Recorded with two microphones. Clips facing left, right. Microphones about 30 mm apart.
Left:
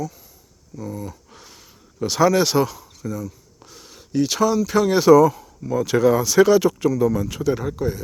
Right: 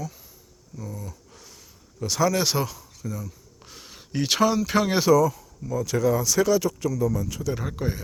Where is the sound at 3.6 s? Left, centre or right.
Centre.